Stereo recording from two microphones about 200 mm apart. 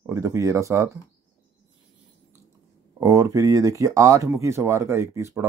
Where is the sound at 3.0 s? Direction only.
15° right (ahead or behind).